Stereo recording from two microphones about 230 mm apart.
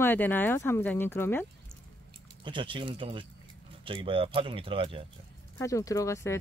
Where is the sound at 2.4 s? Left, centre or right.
Right.